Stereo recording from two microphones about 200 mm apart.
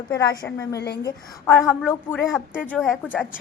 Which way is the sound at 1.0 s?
10° left (ahead or behind).